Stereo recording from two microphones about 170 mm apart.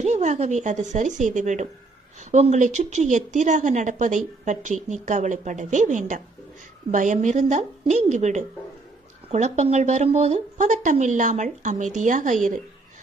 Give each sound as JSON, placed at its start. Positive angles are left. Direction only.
{"t": 0.0, "sound": "speech", "side_deg": -45}